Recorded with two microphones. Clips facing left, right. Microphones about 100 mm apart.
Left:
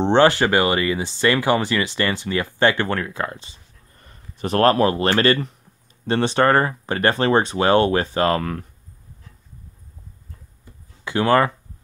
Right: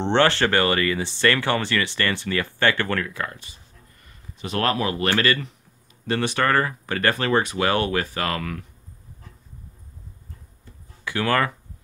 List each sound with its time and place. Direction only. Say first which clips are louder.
0.0 s speech: left 4 dB; 15° left (ahead or behind)
4.0 s speech: left 7 dB; 40° left (ahead or behind)
11.1 s speech: left 5 dB; 20° left (ahead or behind)